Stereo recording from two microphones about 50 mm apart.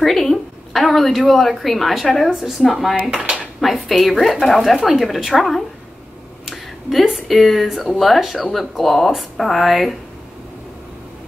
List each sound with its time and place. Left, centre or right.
0.0 s a woman's voice: centre
3.0 s speech: centre
3.6 s a woman's voice: centre